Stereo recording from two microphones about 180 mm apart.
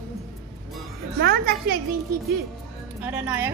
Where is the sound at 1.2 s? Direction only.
60° right (ahead or behind).